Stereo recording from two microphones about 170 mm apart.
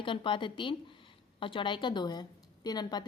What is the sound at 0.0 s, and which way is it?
A woman's voice, 30° left (ahead or behind).